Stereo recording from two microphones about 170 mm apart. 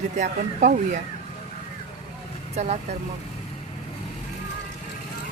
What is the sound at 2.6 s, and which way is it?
Speech, 40° right (ahead or behind).